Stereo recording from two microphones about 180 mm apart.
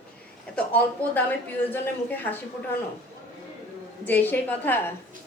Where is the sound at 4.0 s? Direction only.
10° left (ahead or behind).